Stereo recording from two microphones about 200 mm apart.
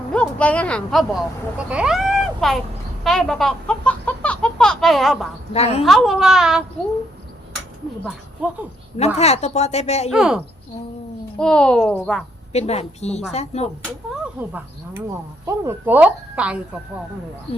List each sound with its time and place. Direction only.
0.1 s speech: 5° left (ahead or behind)
5.5 s a woman's voice: 30° left (ahead or behind)
5.8 s speech: centre (ahead or behind)
8.4 s a woman's voice: 5° right (ahead or behind)
9.1 s a woman's voice: 30° left (ahead or behind)
10.1 s speech: 5° right (ahead or behind)
12.5 s a woman's voice: 30° left (ahead or behind)
15.4 s a woman's voice: 10° right (ahead or behind)